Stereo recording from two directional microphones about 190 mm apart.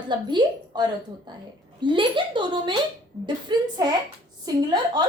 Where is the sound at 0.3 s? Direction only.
25° right (ahead or behind).